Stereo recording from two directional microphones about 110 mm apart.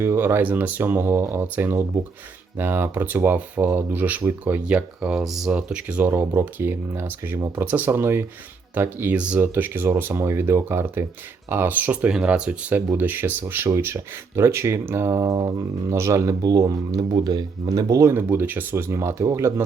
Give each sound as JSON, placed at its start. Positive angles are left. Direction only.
{"t": 0.0, "sound": "speech", "side_deg": -20}